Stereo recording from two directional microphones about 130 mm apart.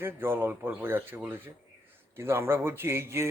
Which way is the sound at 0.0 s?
15° right (ahead or behind).